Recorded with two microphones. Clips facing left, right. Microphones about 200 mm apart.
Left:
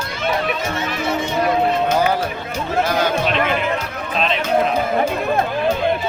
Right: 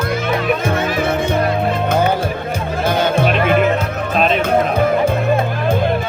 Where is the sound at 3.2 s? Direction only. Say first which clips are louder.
Right 5 dB; 55° right (ahead or behind).